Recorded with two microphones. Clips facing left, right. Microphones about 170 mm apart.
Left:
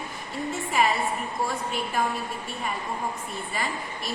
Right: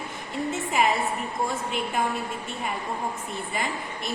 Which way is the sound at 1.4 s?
20° right (ahead or behind).